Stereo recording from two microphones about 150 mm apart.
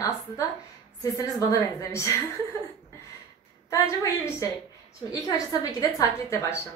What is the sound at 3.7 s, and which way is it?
A woman's voice, 20° left (ahead or behind).